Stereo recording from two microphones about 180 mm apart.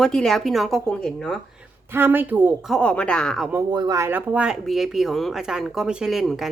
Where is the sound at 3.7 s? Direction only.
25° right (ahead or behind); by 6.5 s centre (ahead or behind).